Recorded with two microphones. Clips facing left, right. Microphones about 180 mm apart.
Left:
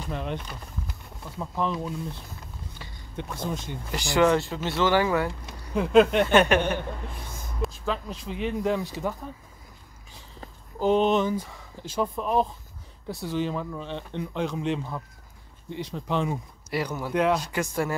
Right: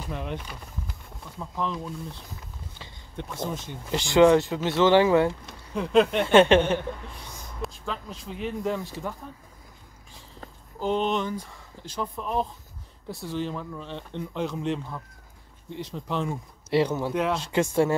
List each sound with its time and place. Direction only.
0.0 s speech: 5° right (ahead or behind)
1.6 s speech: 5° left (ahead or behind)
3.9 s speech: 20° right (ahead or behind)
5.8 s speech: 5° left (ahead or behind)
6.2 s speech: 25° right (ahead or behind)
7.6 s speech: centre (ahead or behind)
10.8 s speech: 10° left (ahead or behind)
13.1 s speech: centre (ahead or behind)
16.7 s speech: 25° right (ahead or behind)
17.1 s speech: 5° right (ahead or behind)
17.4 s speech: 25° right (ahead or behind)